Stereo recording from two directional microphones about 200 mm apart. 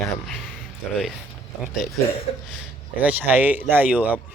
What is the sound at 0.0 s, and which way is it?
Speech, 5° left (ahead or behind).